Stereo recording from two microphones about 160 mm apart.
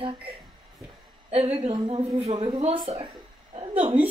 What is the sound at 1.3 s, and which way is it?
A woman's voice, 40° right (ahead or behind).